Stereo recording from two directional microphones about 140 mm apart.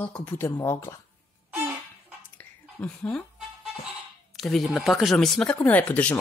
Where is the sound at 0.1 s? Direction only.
10° left (ahead or behind).